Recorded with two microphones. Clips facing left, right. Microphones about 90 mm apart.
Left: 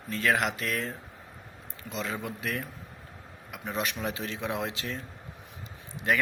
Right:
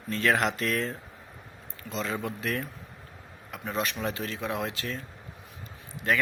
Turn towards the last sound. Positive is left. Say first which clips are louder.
# even
turn(degrees=15)  # may be behind; listen again after turning